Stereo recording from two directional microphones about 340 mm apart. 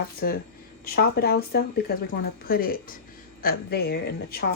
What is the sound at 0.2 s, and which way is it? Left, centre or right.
Speech, left.